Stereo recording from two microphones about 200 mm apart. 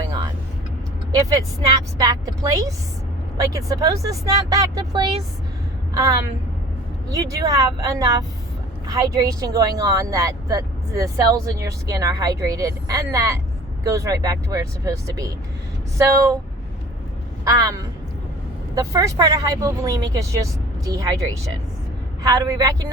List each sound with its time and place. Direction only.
1.3 s speech: 15° right (ahead or behind)
17.4 s a woman's voice: 15° right (ahead or behind)
22.3 s speech: 15° right (ahead or behind)